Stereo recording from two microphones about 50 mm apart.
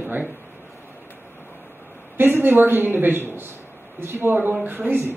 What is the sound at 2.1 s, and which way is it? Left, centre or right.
Speech, right.